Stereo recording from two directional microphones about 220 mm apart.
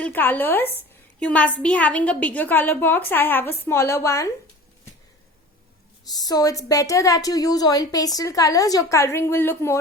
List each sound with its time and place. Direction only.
0.0 s a woman's voice: 10° left (ahead or behind)
6.1 s a woman's voice: 15° left (ahead or behind)